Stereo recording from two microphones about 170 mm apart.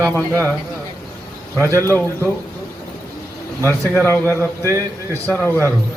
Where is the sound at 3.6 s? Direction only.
10° left (ahead or behind).